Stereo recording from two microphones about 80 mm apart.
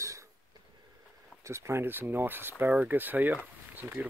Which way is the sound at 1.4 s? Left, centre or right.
Right.